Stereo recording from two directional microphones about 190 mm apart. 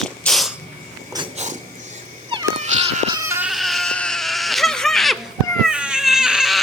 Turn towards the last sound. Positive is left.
turn(degrees=0)  # may be behind; listen again after turning